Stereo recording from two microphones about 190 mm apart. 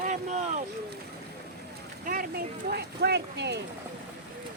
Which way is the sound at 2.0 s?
50° right (ahead or behind).